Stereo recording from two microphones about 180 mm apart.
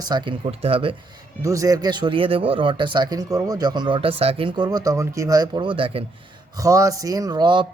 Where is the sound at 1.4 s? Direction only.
20° right (ahead or behind).